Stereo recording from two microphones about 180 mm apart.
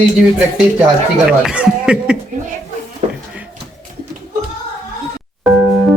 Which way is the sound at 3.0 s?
35° right (ahead or behind).